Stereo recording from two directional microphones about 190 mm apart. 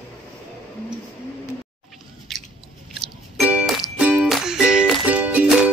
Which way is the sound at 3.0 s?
5° right (ahead or behind).